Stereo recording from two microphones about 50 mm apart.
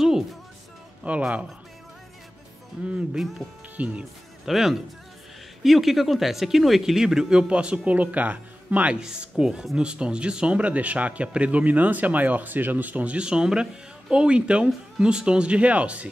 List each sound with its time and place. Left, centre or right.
0.0 s music: centre
1.0 s speech: right
2.8 s speech: right
4.0 s speech: centre; by 8.9 s right
9.0 s speech: centre